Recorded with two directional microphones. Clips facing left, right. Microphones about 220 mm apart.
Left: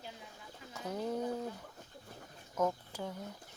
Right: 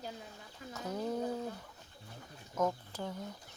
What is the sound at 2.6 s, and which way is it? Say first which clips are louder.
Speech: even; 10° left (ahead or behind).